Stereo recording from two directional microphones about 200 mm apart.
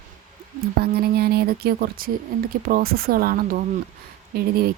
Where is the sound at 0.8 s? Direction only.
50° right (ahead or behind).